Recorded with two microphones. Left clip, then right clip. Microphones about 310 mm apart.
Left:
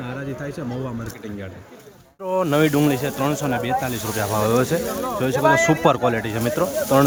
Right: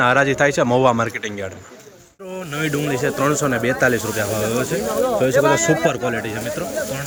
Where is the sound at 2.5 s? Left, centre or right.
Centre.